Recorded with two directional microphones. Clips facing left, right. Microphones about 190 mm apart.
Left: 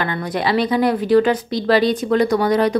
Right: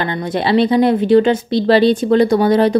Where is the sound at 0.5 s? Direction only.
25° right (ahead or behind).